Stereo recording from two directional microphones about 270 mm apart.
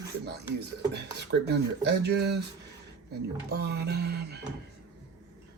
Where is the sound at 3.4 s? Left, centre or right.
Right.